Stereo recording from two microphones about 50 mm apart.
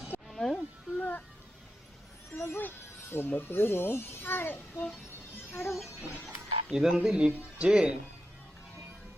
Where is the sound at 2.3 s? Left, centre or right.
Left.